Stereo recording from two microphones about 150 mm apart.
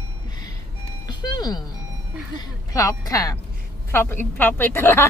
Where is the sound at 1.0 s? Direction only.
25° left (ahead or behind).